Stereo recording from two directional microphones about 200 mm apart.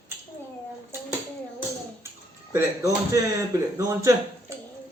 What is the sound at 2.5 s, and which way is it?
Speech, 15° right (ahead or behind).